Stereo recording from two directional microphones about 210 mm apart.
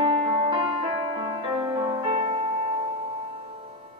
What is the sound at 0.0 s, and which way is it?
Music, 25° right (ahead or behind).